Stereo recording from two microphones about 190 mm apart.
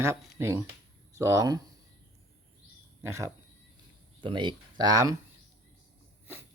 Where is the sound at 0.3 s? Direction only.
15° right (ahead or behind).